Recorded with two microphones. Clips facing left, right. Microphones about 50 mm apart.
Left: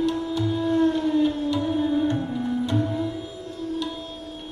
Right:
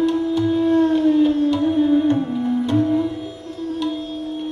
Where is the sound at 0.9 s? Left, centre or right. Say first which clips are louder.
Right 7 dB; right.